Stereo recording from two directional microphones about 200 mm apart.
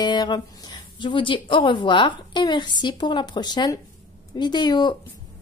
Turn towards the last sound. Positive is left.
turn(degrees=20)  # may be behind; listen again after turning